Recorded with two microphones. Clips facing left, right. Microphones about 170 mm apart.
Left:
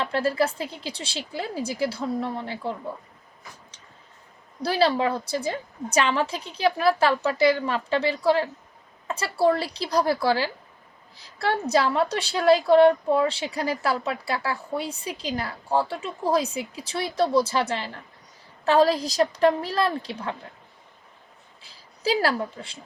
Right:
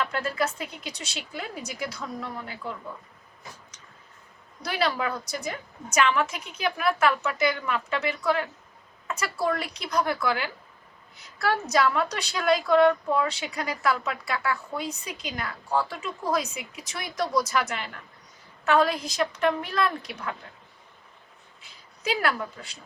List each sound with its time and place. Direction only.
0.0 s a woman's voice: 30° left (ahead or behind)
4.6 s a woman's voice: 30° left (ahead or behind)
21.6 s a woman's voice: 35° left (ahead or behind)